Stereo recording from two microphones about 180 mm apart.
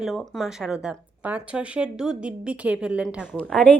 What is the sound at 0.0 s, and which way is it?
Speech, centre (ahead or behind).